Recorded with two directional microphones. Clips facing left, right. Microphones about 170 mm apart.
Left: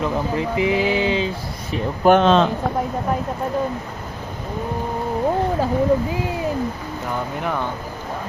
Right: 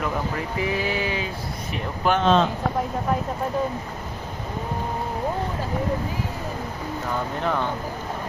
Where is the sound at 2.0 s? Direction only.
75° left (ahead or behind).